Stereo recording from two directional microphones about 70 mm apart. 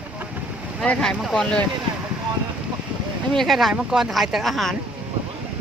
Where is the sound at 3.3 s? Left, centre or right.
Centre.